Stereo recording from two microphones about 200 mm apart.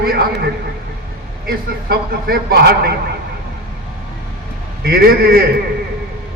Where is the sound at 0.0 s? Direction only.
50° right (ahead or behind).